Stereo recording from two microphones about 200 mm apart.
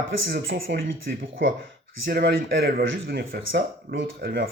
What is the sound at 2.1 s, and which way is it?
Speech, 55° right (ahead or behind).